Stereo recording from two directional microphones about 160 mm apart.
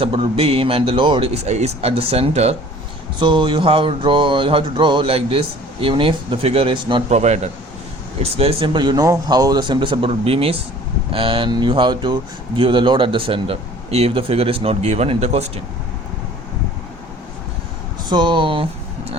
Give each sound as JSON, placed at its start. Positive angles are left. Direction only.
{"t": 0.0, "sound": "speech", "side_deg": -35}
{"t": 3.2, "sound": "speech", "side_deg": -30}
{"t": 7.1, "sound": "speech", "side_deg": -45}
{"t": 18.1, "sound": "speech", "side_deg": -30}